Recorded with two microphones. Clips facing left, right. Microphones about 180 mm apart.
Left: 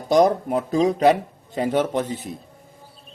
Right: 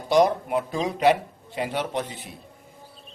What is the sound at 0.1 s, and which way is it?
A man's voice, 40° left (ahead or behind).